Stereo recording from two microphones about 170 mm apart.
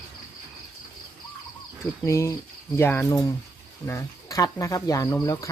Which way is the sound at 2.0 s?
15° left (ahead or behind).